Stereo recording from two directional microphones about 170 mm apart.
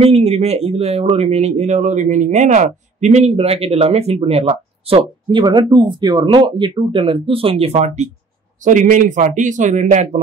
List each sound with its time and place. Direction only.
0.0 s speech: 35° right (ahead or behind)